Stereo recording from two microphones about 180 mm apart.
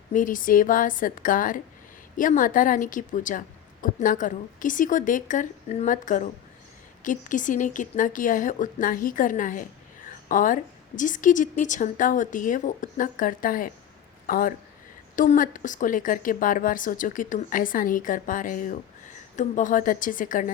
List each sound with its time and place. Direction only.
0.1 s a woman's voice: 50° left (ahead or behind)